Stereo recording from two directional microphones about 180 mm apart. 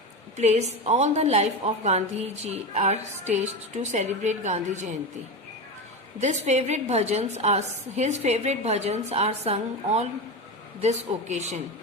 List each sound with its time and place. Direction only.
0.3 s a woman's voice: 40° right (ahead or behind)
6.1 s a woman's voice: 40° right (ahead or behind)